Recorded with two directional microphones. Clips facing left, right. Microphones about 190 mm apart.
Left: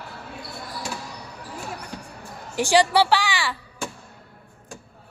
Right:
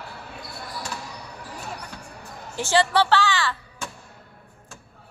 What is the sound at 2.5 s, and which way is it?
Music, 15° left (ahead or behind).